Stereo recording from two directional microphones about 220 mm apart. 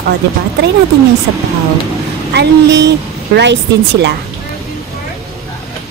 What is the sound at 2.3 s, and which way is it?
Speech, 55° right (ahead or behind).